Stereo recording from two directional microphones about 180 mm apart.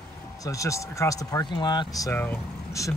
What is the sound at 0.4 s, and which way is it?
Speech, 20° left (ahead or behind).